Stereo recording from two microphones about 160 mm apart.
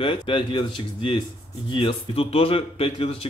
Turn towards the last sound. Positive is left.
turn(degrees=35)  # may be behind; listen again after turning